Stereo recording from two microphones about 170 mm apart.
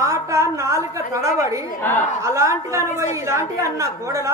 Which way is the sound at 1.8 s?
10° left (ahead or behind).